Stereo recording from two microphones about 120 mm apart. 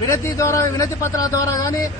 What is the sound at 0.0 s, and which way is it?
A man's voice, 25° left (ahead or behind).